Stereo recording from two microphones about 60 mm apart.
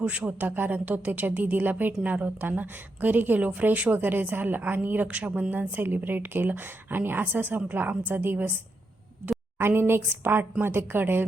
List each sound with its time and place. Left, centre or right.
0.0 s a woman's voice: right
9.6 s a woman's voice: right